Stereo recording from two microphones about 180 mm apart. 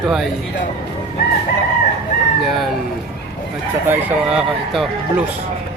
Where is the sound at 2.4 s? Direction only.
Centre (ahead or behind).